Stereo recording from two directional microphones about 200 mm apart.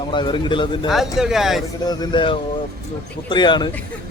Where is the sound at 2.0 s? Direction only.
25° left (ahead or behind).